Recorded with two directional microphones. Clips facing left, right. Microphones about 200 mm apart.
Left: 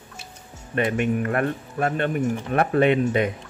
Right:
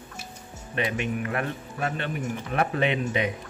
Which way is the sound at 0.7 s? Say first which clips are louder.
Left 6 dB; 50° left (ahead or behind).